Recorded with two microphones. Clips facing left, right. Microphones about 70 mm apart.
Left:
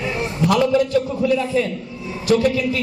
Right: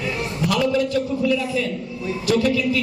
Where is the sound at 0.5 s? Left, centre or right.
Left.